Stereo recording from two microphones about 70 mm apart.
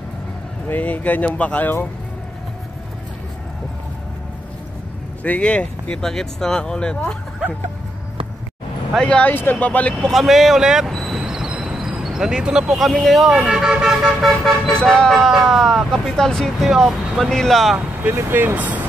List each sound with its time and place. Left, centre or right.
0.7 s speech: left
5.2 s speech: centre
5.9 s speech: centre
9.0 s speech: centre
9.3 s speech: left
10.0 s speech: centre
10.9 s vehicle: centre
11.1 s vehicle: centre
13.3 s speech: centre
14.7 s speech: centre
16.6 s speech: centre
18.1 s speech: right